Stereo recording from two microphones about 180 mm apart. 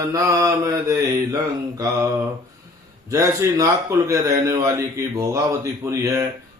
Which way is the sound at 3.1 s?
20° right (ahead or behind).